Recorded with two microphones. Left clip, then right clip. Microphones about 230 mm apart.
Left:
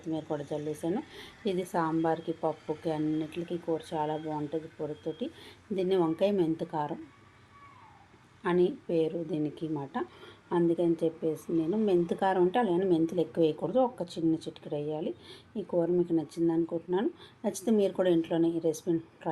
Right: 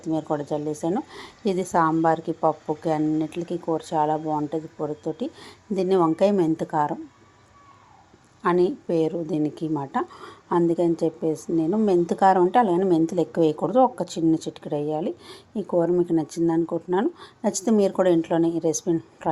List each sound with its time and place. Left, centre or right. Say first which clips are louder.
0.0 s speech: right 9 dB; right
8.4 s speech: right 7 dB; right